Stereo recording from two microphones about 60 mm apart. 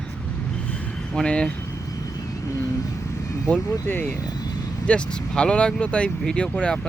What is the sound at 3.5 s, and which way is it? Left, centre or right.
Speech, left.